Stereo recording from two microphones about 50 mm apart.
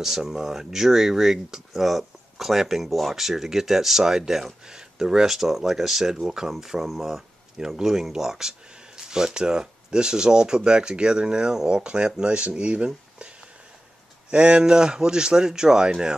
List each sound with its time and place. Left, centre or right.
0.0 s speech: centre; by 13.3 s right
14.3 s speech: right